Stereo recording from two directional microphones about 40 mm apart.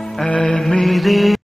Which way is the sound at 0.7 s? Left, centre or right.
Centre.